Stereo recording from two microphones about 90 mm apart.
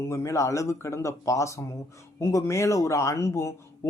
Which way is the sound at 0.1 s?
35° left (ahead or behind).